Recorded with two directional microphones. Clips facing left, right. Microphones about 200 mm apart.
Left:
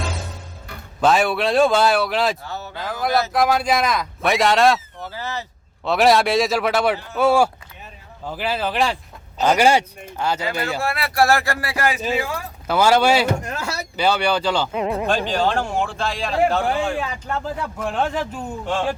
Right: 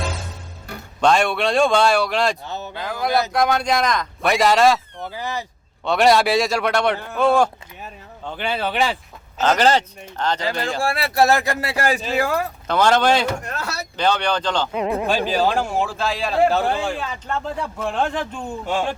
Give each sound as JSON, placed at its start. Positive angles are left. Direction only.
{"t": 1.0, "sound": "speech", "side_deg": 5}
{"t": 2.4, "sound": "speech", "side_deg": -20}
{"t": 2.7, "sound": "speech", "side_deg": 0}
{"t": 5.1, "sound": "speech", "side_deg": -15}
{"t": 5.8, "sound": "speech", "side_deg": 0}
{"t": 9.4, "sound": "speech", "side_deg": 10}
{"t": 10.8, "sound": "speech", "side_deg": -30}
{"t": 12.1, "sound": "speech", "side_deg": -55}
{"t": 12.6, "sound": "speech", "side_deg": 5}
{"t": 16.9, "sound": "speech", "side_deg": 10}